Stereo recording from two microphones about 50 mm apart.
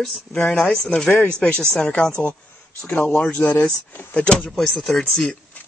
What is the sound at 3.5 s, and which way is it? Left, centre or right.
Speech, left.